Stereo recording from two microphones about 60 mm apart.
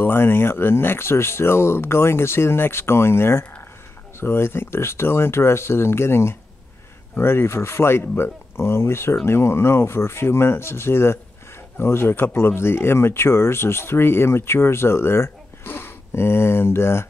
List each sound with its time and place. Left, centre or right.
0.0 s speech: left